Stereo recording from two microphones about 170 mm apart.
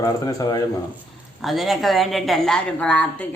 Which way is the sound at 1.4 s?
Centre (ahead or behind).